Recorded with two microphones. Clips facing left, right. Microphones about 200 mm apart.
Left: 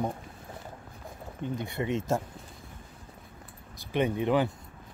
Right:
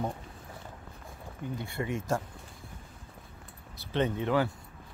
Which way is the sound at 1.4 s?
20° left (ahead or behind).